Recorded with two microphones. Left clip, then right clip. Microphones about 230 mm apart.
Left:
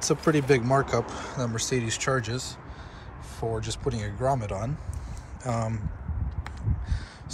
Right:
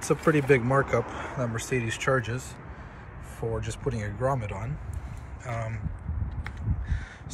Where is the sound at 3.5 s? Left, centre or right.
Centre.